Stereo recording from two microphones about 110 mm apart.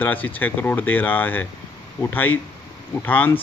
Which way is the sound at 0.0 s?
15° left (ahead or behind).